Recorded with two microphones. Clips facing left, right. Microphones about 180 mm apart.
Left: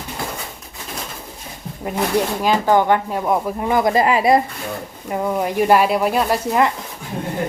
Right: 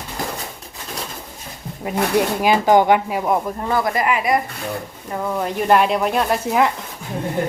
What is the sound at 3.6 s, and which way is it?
Speech, 15° left (ahead or behind).